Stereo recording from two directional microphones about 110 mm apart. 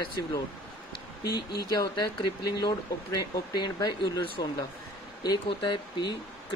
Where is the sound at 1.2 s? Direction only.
40° left (ahead or behind).